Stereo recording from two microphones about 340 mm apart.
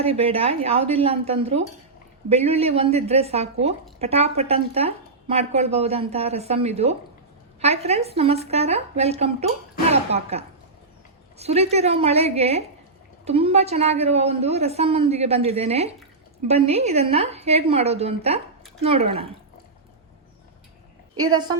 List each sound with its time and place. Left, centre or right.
0.0 s a woman's voice: centre